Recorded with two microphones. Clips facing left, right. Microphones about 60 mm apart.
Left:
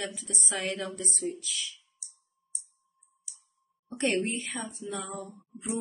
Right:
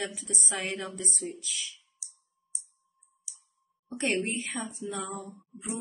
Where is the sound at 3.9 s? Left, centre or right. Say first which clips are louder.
Left 1 dB; centre.